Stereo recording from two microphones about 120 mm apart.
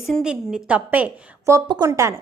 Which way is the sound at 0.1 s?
5° right (ahead or behind).